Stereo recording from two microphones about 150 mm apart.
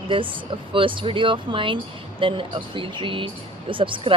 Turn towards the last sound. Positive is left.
turn(degrees=-35)  # may be behind; listen again after turning